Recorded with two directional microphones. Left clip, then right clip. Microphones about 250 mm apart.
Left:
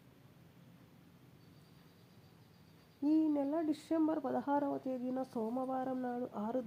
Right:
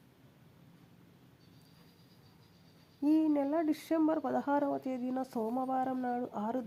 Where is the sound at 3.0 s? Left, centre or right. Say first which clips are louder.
Right 3 dB; right.